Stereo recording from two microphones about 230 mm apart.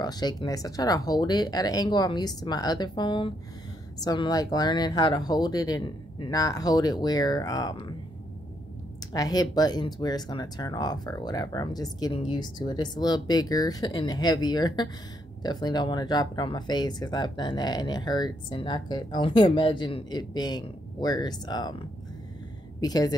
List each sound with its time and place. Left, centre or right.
0.0 s speech: centre
9.1 s speech: centre